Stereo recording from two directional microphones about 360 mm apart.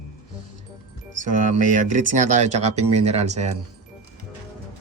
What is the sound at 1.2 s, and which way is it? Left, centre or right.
Speech, right.